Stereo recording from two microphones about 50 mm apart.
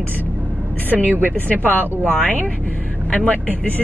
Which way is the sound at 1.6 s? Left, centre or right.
Right.